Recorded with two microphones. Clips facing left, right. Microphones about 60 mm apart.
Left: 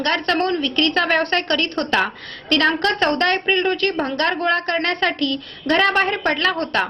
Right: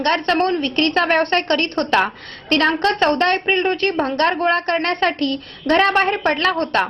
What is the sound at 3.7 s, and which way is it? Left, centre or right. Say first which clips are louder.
A woman's voice: right 1 dB; right.